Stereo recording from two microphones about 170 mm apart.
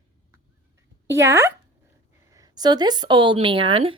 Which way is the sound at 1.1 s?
15° right (ahead or behind).